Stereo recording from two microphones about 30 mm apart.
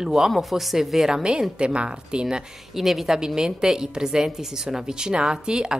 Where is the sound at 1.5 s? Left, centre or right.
Right.